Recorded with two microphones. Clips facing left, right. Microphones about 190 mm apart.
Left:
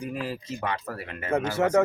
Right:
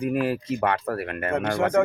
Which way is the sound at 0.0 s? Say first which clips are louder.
Right 8 dB; 60° right (ahead or behind).